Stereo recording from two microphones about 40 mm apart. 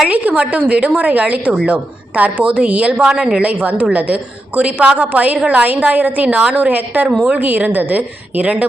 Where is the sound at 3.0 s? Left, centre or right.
Centre.